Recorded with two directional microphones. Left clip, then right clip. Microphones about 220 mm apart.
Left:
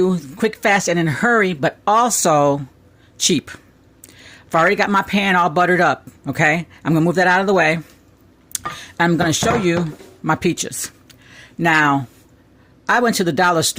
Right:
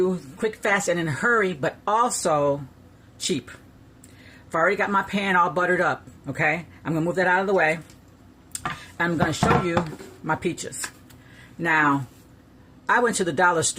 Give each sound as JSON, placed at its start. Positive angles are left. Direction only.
{"t": 0.0, "sound": "speech", "side_deg": 40}
{"t": 8.8, "sound": "speech", "side_deg": 45}
{"t": 11.3, "sound": "a sound", "side_deg": 45}
{"t": 12.8, "sound": "speech", "side_deg": 40}